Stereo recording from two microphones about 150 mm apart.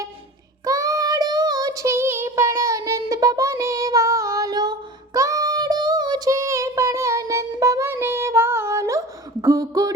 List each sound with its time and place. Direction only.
0.6 s child singing: 20° right (ahead or behind)